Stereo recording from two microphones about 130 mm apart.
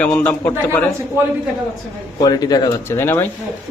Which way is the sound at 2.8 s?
20° left (ahead or behind).